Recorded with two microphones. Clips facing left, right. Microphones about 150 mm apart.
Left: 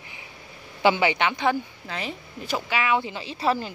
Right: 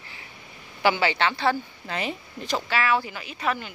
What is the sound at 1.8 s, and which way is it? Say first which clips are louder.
Speech: right 7 dB; centre (ahead or behind).